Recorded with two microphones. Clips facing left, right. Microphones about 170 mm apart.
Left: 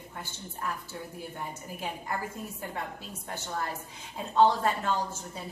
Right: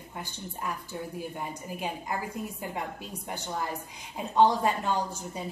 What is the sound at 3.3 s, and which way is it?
A woman's voice, 15° right (ahead or behind).